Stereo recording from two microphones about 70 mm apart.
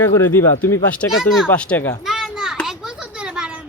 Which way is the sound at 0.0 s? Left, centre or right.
Left.